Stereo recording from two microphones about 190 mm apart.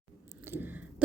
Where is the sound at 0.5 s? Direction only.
10° right (ahead or behind).